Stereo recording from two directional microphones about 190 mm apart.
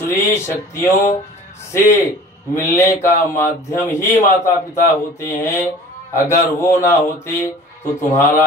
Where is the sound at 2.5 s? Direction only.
15° left (ahead or behind).